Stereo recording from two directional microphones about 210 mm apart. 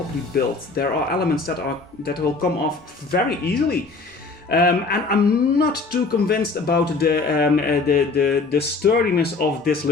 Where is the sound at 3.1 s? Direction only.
45° left (ahead or behind).